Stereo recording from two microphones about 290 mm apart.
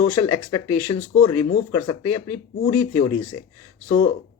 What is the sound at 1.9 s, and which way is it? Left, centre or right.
Speech, left.